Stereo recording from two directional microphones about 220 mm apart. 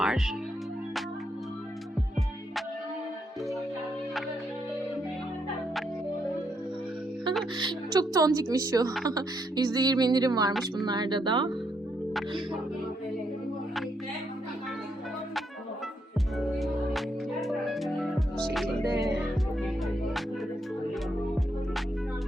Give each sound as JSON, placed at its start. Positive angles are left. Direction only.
{"t": 0.0, "sound": "music", "side_deg": 0}
{"t": 7.6, "sound": "a woman's voice", "side_deg": -20}
{"t": 10.5, "sound": "a woman's voice", "side_deg": 0}
{"t": 10.8, "sound": "speech", "side_deg": -20}
{"t": 17.4, "sound": "music", "side_deg": 0}